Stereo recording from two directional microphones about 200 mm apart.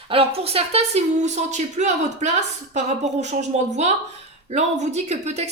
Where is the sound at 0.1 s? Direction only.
30° right (ahead or behind).